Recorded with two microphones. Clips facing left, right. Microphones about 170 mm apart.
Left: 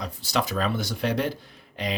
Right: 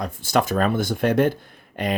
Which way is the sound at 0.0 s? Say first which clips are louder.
Right 6 dB; 50° right (ahead or behind).